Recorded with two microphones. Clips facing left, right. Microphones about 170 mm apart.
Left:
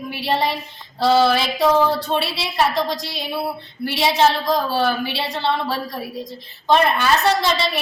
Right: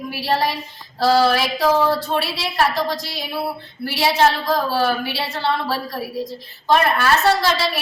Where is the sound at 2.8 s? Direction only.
20° left (ahead or behind).